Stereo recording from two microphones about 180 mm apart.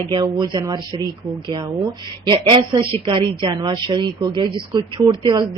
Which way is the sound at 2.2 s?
25° right (ahead or behind).